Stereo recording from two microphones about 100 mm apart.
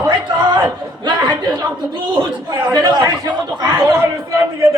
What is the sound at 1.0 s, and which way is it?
Speech, 50° right (ahead or behind).